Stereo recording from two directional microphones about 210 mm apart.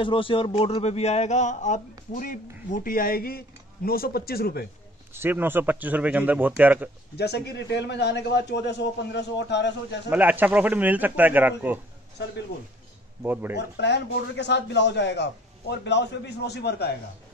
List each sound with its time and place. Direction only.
0.0 s speech: 25° left (ahead or behind); by 4.6 s 45° left (ahead or behind)
5.1 s speech: 10° right (ahead or behind)
7.2 s a man's voice: 50° left (ahead or behind)
10.0 s speech: 10° right (ahead or behind)
13.2 s speech: 10° right (ahead or behind)
13.6 s a man's voice: 55° left (ahead or behind)